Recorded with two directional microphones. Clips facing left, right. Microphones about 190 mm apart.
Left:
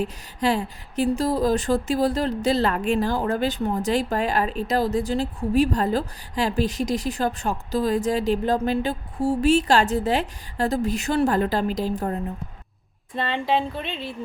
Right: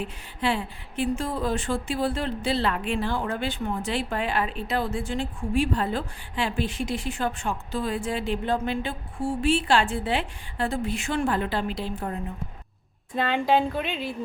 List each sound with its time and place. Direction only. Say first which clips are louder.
0.0 s speech: left 4 dB; 40° left (ahead or behind)
13.1 s speech: right 1 dB; centre (ahead or behind)